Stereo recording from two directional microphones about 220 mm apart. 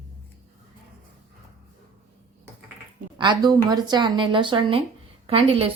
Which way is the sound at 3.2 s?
20° right (ahead or behind).